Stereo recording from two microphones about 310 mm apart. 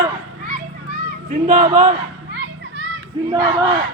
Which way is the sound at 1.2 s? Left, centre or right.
Right.